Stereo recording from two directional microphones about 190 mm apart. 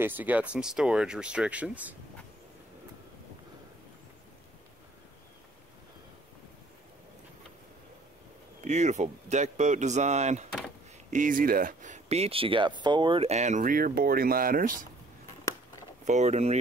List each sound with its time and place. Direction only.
0.0 s speech: 10° right (ahead or behind)
8.6 s speech: 40° right (ahead or behind)
16.1 s speech: 40° right (ahead or behind)